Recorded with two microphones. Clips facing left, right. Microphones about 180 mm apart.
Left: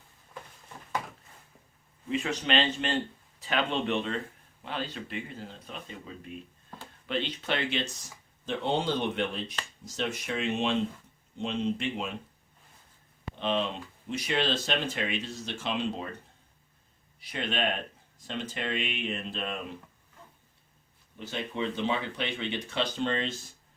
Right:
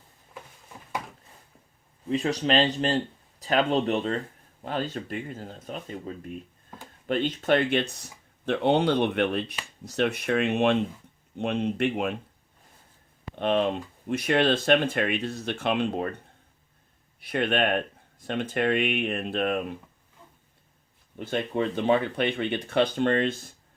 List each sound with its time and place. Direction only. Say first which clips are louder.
2.0 s speech: right 5 dB; 35° right (ahead or behind); by 12.1 s 60° right (ahead or behind)
13.4 s speech: right 6 dB; 55° right (ahead or behind)
17.2 s speech: right 7 dB; 55° right (ahead or behind)
21.2 s speech: right 6 dB; 55° right (ahead or behind)